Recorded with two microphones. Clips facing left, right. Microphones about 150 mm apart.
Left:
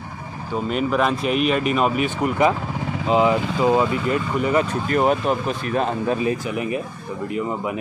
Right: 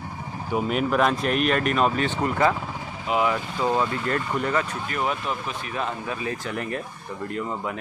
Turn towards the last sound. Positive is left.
turn(degrees=10)  # may be behind; listen again after turning